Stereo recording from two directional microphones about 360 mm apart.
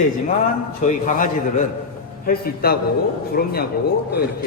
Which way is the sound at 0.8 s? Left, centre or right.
Left.